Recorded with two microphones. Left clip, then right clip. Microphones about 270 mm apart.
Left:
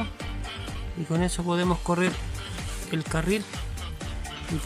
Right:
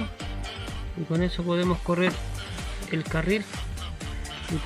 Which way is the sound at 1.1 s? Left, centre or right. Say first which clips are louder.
Even; centre.